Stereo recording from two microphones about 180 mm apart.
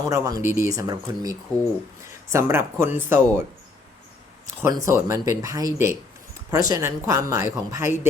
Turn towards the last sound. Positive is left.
turn(degrees=-15)  # may be behind; listen again after turning